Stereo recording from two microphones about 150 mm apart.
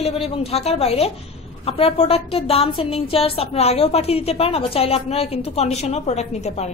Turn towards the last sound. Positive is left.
turn(degrees=50)  # may be behind; listen again after turning